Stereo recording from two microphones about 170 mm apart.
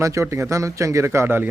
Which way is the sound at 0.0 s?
15° right (ahead or behind).